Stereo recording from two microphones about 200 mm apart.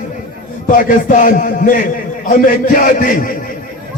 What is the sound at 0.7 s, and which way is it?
A man's voice, 40° left (ahead or behind).